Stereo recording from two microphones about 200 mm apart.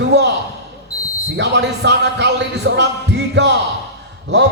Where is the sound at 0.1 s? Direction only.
60° right (ahead or behind).